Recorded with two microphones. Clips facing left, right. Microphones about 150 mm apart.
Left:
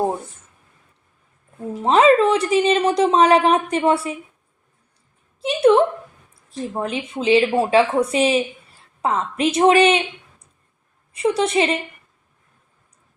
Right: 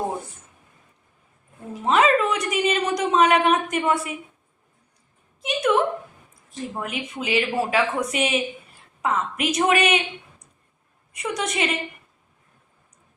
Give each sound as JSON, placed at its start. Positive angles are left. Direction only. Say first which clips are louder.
{"t": 1.8, "sound": "speech", "louder": "left 5 dB", "side_deg": 30}
{"t": 5.4, "sound": "a woman's voice", "louder": "left 7 dB", "side_deg": 30}
{"t": 11.1, "sound": "speech", "louder": "left 9 dB", "side_deg": 30}